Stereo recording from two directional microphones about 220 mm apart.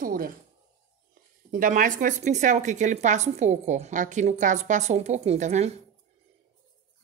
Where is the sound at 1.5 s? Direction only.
40° right (ahead or behind).